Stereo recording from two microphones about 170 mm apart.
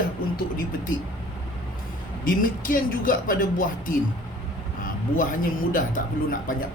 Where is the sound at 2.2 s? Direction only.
55° left (ahead or behind).